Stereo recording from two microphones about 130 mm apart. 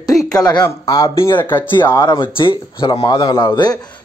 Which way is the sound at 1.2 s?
15° left (ahead or behind).